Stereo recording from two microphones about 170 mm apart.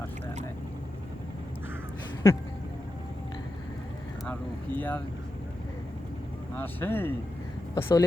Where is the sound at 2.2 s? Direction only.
15° left (ahead or behind).